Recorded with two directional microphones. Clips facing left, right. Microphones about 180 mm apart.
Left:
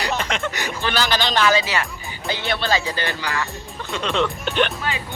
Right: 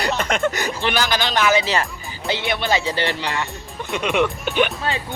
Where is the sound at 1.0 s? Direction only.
10° right (ahead or behind).